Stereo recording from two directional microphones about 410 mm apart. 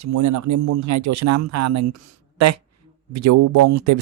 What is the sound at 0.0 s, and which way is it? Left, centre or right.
Speech, right.